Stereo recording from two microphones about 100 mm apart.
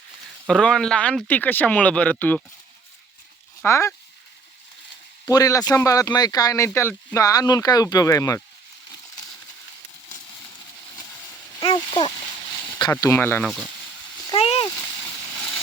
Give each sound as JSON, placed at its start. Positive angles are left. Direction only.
{"t": 0.4, "sound": "speech", "side_deg": 5}
{"t": 3.6, "sound": "speech", "side_deg": 30}
{"t": 5.3, "sound": "speech", "side_deg": 35}
{"t": 11.6, "sound": "speech", "side_deg": 55}
{"t": 12.9, "sound": "speech", "side_deg": 25}
{"t": 14.3, "sound": "a sound", "side_deg": 80}